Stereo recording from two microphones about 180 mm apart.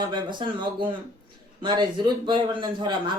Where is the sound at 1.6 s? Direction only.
25° right (ahead or behind).